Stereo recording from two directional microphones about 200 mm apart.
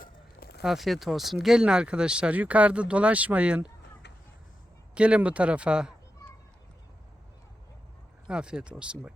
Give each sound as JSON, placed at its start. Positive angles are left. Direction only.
{"t": 0.0, "sound": "a sound", "side_deg": 50}
{"t": 0.6, "sound": "speech", "side_deg": 0}
{"t": 4.9, "sound": "speech", "side_deg": -5}
{"t": 8.3, "sound": "speech", "side_deg": -5}